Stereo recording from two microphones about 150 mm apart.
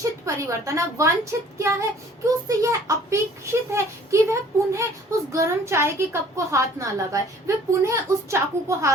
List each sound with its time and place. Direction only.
0.3 s a woman's voice: 20° right (ahead or behind)